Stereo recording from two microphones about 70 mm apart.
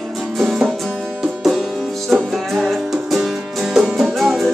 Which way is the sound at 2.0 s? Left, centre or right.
Centre.